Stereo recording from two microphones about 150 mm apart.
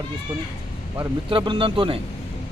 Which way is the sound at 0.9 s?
30° right (ahead or behind).